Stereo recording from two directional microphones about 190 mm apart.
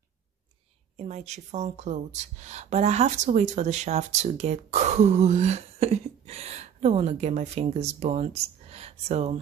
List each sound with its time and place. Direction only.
0.9 s speech: 35° right (ahead or behind)